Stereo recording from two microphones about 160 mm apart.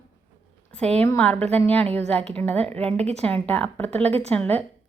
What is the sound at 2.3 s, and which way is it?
A woman's voice, 10° left (ahead or behind).